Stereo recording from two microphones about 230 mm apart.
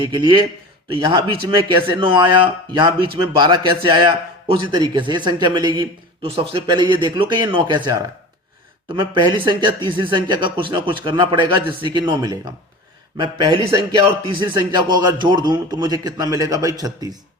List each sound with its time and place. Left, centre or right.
0.0 s a man's voice: centre